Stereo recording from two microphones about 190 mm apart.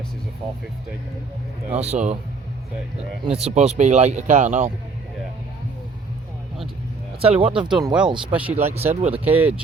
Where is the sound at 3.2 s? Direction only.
30° right (ahead or behind).